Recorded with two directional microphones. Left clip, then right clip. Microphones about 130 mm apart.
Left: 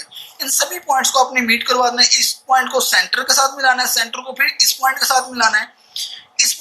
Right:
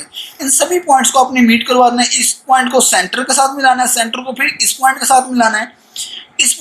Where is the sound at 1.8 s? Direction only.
70° left (ahead or behind).